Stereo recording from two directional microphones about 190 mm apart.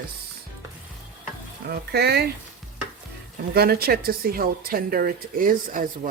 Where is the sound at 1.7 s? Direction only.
60° right (ahead or behind).